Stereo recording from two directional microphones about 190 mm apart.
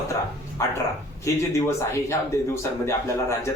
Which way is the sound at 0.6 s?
15° left (ahead or behind).